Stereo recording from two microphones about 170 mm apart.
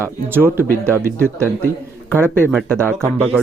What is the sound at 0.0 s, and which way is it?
Speech, 15° right (ahead or behind).